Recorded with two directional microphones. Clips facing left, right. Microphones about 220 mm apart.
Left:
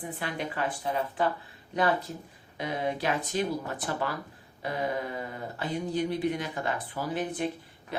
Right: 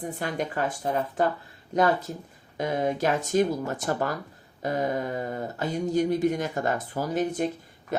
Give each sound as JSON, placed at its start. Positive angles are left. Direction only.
{"t": 0.0, "sound": "speech", "side_deg": -45}